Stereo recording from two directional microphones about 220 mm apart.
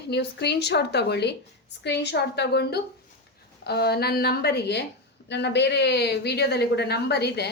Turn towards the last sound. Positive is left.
turn(degrees=50)  # may be behind; listen again after turning